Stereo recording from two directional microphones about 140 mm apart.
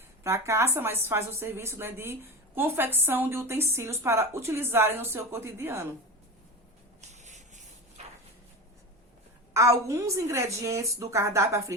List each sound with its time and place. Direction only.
0.3 s a woman's voice: 20° right (ahead or behind)
7.1 s rub: 55° right (ahead or behind)
8.0 s a sound: 50° right (ahead or behind)
9.5 s speech: 20° right (ahead or behind)